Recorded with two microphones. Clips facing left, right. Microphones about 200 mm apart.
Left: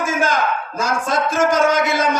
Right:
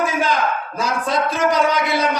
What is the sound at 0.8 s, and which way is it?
A man's voice, 45° left (ahead or behind).